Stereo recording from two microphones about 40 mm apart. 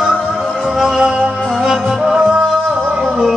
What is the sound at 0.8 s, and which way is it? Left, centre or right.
Music, centre.